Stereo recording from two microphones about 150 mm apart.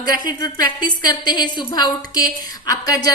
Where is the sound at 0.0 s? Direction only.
25° left (ahead or behind).